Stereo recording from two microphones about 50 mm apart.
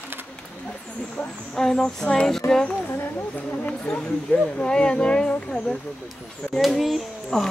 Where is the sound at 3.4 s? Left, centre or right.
Left.